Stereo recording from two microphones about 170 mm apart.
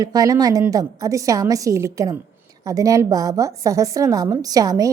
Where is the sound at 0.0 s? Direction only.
20° right (ahead or behind).